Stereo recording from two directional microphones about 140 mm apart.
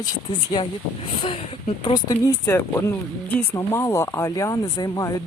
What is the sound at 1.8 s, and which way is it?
Speech, 30° left (ahead or behind).